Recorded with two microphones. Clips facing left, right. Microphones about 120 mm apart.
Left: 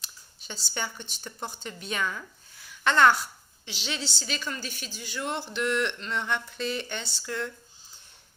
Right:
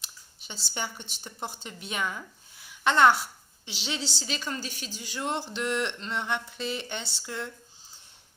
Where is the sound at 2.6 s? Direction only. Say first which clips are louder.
Even; 20° right (ahead or behind).